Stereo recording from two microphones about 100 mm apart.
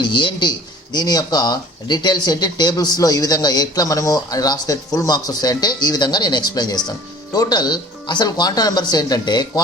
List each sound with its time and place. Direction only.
0.0 s speech: 50° left (ahead or behind)